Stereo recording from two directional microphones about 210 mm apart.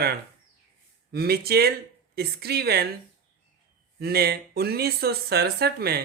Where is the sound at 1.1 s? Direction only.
50° right (ahead or behind).